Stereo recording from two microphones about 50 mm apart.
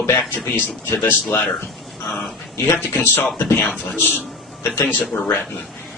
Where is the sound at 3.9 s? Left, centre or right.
Left.